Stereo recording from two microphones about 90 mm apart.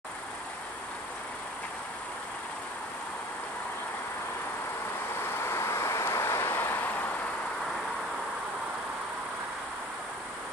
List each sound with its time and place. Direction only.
5.4 s vehicle: 30° left (ahead or behind)